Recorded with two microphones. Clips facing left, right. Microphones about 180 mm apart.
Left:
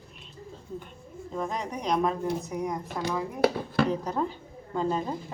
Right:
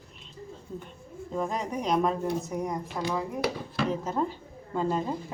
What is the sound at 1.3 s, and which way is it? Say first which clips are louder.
Speech: right 2 dB; centre (ahead or behind).